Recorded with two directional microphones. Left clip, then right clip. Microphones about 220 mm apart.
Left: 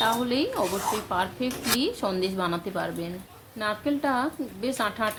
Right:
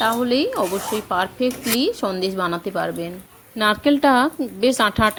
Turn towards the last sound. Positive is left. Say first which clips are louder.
# right 10 dB
turn(degrees=-35)  # may be behind; listen again after turning